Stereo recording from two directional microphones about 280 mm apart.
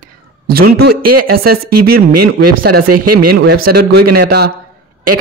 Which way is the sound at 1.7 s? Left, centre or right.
Right.